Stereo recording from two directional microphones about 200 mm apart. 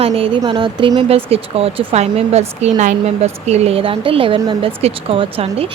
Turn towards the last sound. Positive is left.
turn(degrees=-30)  # may be behind; listen again after turning